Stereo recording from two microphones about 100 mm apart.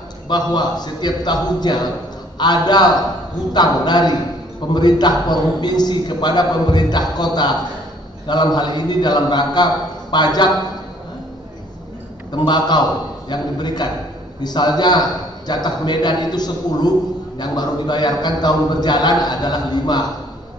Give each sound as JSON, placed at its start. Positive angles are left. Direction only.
{"t": 0.3, "sound": "a man's voice", "side_deg": 45}
{"t": 12.3, "sound": "a man's voice", "side_deg": 45}